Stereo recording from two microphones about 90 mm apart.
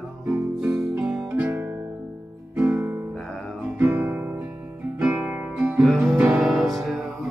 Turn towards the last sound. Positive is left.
turn(degrees=0)  # may be behind; listen again after turning